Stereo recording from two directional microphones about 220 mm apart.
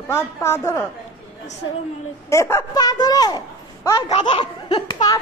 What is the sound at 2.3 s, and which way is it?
A woman's voice, 15° left (ahead or behind).